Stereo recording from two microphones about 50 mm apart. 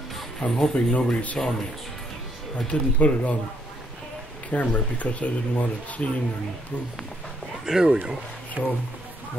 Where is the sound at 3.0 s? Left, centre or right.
Left.